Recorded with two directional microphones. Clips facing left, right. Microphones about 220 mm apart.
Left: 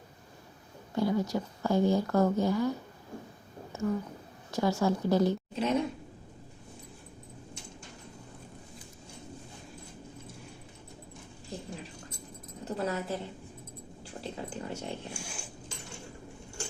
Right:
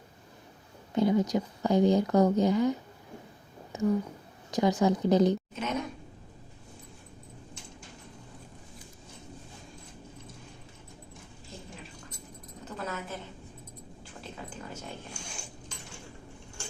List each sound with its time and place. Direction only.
0.9 s speech: 20° right (ahead or behind)
3.7 s a sound: 15° right (ahead or behind)
4.5 s speech: 15° right (ahead or behind)
5.5 s speech: 30° left (ahead or behind)
12.6 s keys jangling: 30° left (ahead or behind)
14.0 s cat: 30° left (ahead or behind)
15.2 s a sound: 5° left (ahead or behind)